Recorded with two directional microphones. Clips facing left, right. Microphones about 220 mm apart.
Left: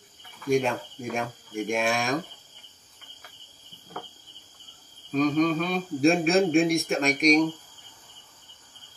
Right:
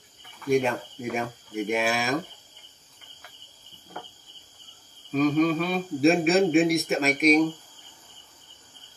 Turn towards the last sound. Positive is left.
turn(degrees=-5)  # may be behind; listen again after turning